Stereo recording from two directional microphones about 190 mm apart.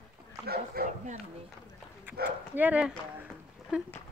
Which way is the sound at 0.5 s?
50° right (ahead or behind).